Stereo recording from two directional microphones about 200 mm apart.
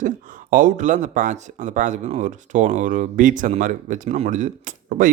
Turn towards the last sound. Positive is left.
turn(degrees=-40)  # may be behind; listen again after turning